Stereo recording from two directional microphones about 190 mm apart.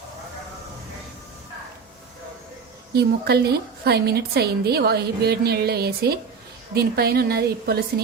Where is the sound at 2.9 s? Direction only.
55° right (ahead or behind).